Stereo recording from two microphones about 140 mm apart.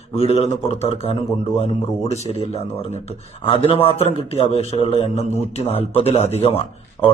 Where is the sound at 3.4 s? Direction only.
40° left (ahead or behind).